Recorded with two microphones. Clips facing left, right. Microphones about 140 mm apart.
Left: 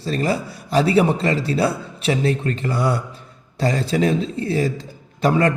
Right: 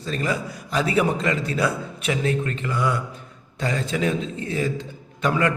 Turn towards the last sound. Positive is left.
turn(degrees=35)  # may be behind; listen again after turning